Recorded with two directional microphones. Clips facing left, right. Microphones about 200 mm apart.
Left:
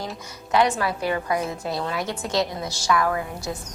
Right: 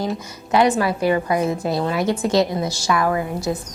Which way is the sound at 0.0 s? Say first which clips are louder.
Right 8 dB; 10° right (ahead or behind).